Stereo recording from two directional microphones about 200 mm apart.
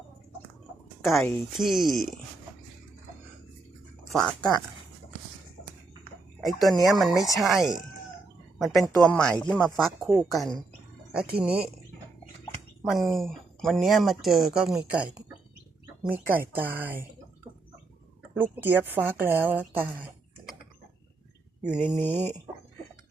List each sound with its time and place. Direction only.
1.0 s speech: centre (ahead or behind)
4.1 s speech: 5° left (ahead or behind)
6.4 s speech: centre (ahead or behind)
7.1 s speech: 15° left (ahead or behind)
7.3 s speech: centre (ahead or behind)
12.8 s a woman's voice: centre (ahead or behind)
18.3 s a woman's voice: 10° right (ahead or behind)
22.0 s speech: 10° left (ahead or behind)